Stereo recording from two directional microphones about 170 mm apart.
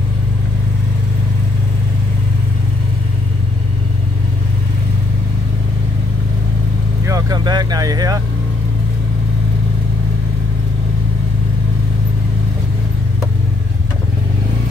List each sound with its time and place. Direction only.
7.1 s speech: 20° right (ahead or behind)